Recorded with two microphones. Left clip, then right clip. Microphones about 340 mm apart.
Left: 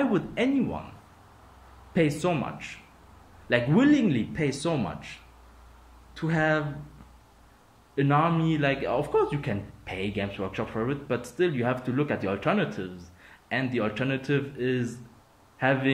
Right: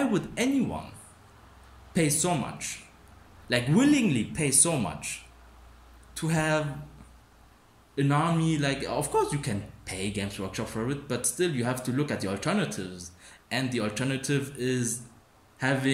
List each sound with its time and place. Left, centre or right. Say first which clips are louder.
0.0 s a man's voice: left 2 dB; centre
2.0 s a man's voice: left 2 dB; centre
7.9 s a man's voice: left 3 dB; centre